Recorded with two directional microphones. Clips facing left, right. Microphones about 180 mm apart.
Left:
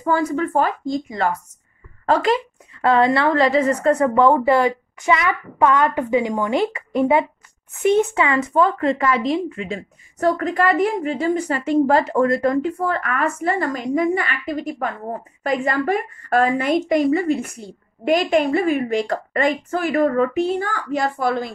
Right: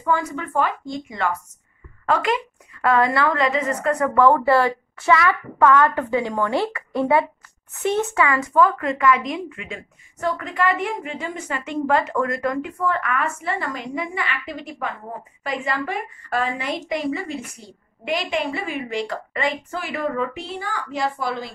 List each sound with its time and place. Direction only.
0.0 s a woman's voice: 35° left (ahead or behind)